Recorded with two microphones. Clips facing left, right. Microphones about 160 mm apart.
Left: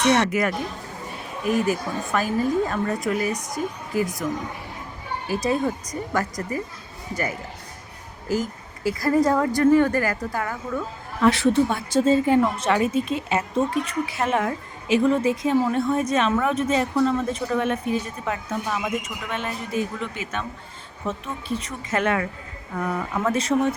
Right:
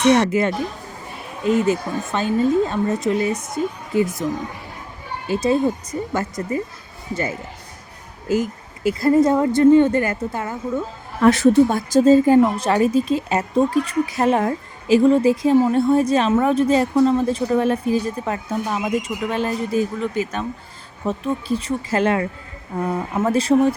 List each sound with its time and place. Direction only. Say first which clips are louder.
0.2 s a woman's voice: right 4 dB; 30° right (ahead or behind)
5.3 s a woman's voice: right 5 dB; 25° right (ahead or behind)
11.2 s speech: right 5 dB; 45° right (ahead or behind)